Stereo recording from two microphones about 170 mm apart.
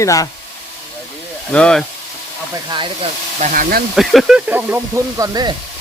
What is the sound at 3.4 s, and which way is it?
Speech, 50° right (ahead or behind).